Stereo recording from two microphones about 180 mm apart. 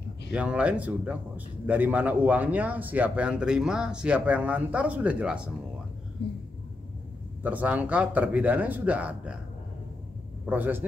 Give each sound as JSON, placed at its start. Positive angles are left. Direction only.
{"t": 0.3, "sound": "a man's voice", "side_deg": -5}
{"t": 6.2, "sound": "speech", "side_deg": 65}
{"t": 7.4, "sound": "a man's voice", "side_deg": -10}
{"t": 10.4, "sound": "a man's voice", "side_deg": -10}